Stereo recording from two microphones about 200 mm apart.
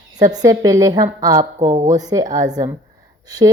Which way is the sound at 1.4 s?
40° right (ahead or behind).